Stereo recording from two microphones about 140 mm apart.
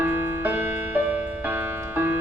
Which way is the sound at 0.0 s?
15° right (ahead or behind).